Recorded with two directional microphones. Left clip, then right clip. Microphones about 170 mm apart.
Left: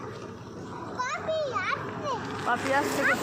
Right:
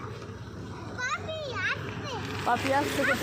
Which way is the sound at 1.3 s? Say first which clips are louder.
Left 7 dB; 10° right (ahead or behind).